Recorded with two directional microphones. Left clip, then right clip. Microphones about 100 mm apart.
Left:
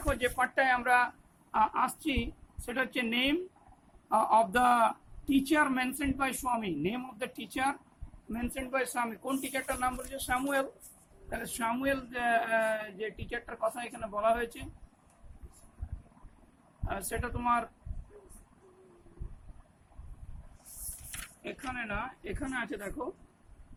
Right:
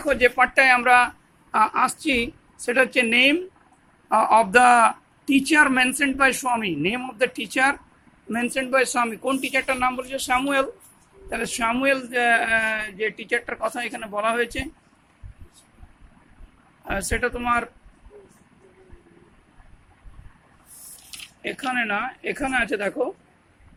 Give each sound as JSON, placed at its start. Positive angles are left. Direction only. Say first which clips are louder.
{"t": 0.0, "sound": "speech", "louder": "right 12 dB", "side_deg": -25}
{"t": 16.8, "sound": "speech", "louder": "right 12 dB", "side_deg": -35}
{"t": 21.4, "sound": "speech", "louder": "right 14 dB", "side_deg": -30}